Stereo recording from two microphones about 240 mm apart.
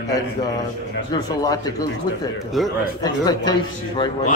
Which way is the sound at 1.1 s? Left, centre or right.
Centre.